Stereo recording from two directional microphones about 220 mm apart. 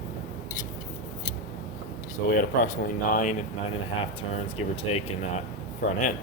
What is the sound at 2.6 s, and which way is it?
Speech, 35° left (ahead or behind).